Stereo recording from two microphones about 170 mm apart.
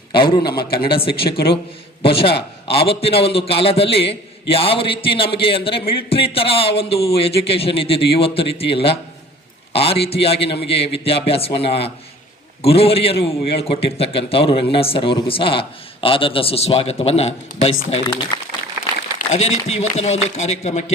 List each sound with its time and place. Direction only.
0.1 s a man's voice: 30° left (ahead or behind)
0.5 s a man's voice: 65° left (ahead or behind)
2.0 s a man's voice: 35° left (ahead or behind)
18.3 s speech: 25° left (ahead or behind)
19.3 s a man's voice: 40° left (ahead or behind)